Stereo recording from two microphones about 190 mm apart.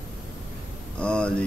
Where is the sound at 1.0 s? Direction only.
5° left (ahead or behind).